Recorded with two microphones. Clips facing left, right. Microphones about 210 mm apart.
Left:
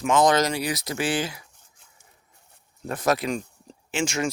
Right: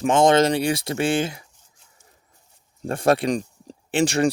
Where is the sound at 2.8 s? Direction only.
30° right (ahead or behind).